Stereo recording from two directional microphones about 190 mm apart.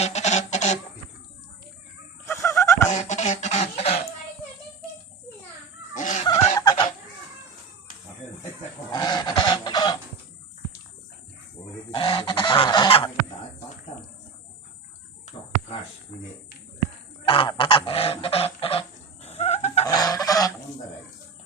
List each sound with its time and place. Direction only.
0.0 s a sound: 35° left (ahead or behind)
2.2 s fowl: 15° left (ahead or behind)
2.9 s a sound: 40° left (ahead or behind)
5.9 s fowl: 40° left (ahead or behind)
6.2 s a sound: 20° left (ahead or behind)
8.9 s fowl: 20° left (ahead or behind)
11.9 s goose: 25° left (ahead or behind)
17.2 s goose: 30° left (ahead or behind)
19.8 s goose: 20° left (ahead or behind)